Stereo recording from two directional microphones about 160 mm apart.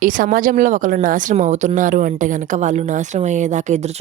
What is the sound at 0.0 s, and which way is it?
Speech, 55° right (ahead or behind).